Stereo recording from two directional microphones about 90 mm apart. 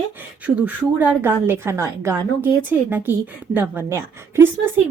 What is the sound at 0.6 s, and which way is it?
Speech, 15° right (ahead or behind).